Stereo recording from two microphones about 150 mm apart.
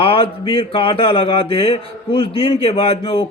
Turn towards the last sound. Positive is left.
turn(degrees=40)  # may be behind; listen again after turning